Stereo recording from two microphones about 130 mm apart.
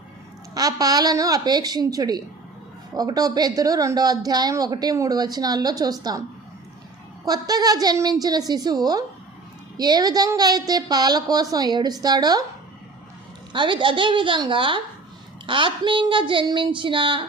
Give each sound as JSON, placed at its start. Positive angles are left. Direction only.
{"t": 0.5, "sound": "a woman's voice", "side_deg": -30}
{"t": 7.3, "sound": "a woman's voice", "side_deg": -30}
{"t": 13.5, "sound": "speech", "side_deg": -40}